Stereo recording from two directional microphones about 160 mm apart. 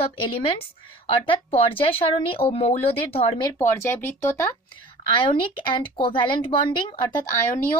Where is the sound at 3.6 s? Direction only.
15° left (ahead or behind).